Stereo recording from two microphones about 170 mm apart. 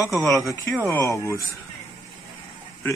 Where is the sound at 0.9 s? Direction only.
15° left (ahead or behind).